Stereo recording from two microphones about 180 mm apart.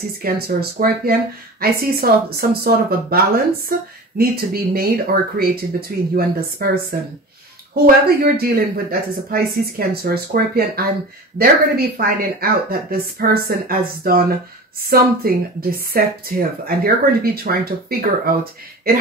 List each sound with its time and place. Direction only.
0.2 s speech: 55° right (ahead or behind)